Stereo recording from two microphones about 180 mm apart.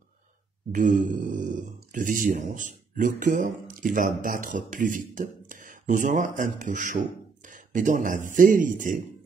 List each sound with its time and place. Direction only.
0.7 s speech: 45° right (ahead or behind)